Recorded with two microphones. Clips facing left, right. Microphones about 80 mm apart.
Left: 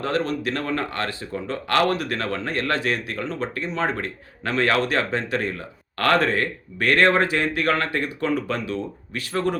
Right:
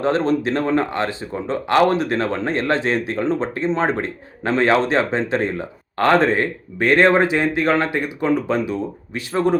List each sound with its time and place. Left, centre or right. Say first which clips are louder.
0.0 s speech: right 6 dB; right